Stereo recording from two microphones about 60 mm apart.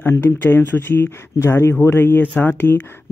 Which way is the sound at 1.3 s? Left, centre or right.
Left.